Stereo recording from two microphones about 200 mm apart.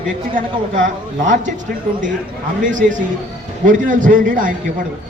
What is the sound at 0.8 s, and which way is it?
A man's voice, 40° right (ahead or behind).